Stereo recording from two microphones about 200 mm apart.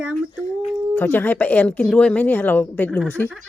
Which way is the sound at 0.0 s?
5° right (ahead or behind).